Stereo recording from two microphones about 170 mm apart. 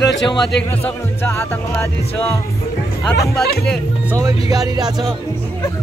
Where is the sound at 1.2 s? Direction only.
15° left (ahead or behind).